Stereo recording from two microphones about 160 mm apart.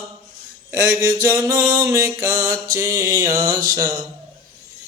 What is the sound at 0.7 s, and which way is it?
Speech, 15° right (ahead or behind).